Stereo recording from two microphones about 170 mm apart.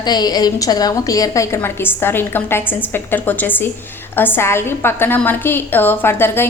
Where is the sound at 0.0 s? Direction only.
25° left (ahead or behind).